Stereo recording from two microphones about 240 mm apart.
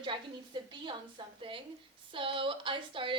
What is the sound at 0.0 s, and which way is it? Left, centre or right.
A woman's voice, centre.